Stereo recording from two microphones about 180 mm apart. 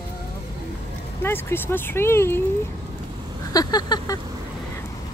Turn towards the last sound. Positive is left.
turn(degrees=20)  # may be behind; listen again after turning